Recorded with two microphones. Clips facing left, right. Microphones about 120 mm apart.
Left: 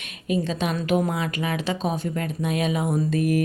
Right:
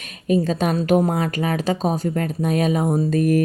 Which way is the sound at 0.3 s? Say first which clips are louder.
Right 5 dB; 40° right (ahead or behind).